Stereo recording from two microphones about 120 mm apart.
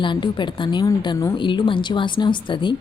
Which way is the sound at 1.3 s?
40° left (ahead or behind).